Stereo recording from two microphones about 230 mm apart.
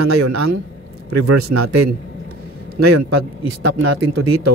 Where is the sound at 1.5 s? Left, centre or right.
Right.